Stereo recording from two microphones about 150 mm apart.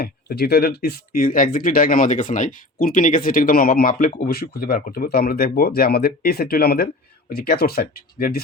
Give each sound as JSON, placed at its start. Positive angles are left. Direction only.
{"t": 0.0, "sound": "speech", "side_deg": 90}